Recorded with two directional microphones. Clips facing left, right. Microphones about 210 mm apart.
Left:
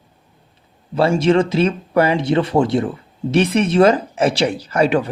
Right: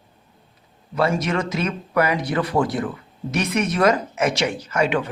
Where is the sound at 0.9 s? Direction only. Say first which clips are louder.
Left 7 dB; 30° left (ahead or behind).